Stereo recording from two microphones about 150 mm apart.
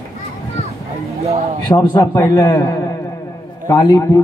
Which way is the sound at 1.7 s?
25° left (ahead or behind).